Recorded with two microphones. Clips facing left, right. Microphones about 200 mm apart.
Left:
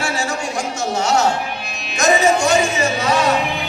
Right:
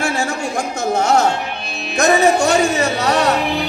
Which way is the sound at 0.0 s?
55° right (ahead or behind).